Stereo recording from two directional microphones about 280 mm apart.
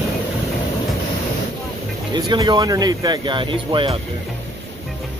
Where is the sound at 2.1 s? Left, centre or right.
Centre.